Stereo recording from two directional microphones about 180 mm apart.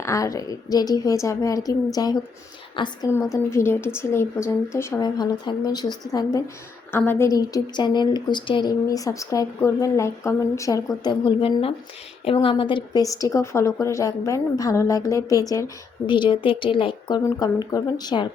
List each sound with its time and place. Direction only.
0.0 s a woman's voice: 15° left (ahead or behind)
3.3 s a woman's voice: 15° left (ahead or behind)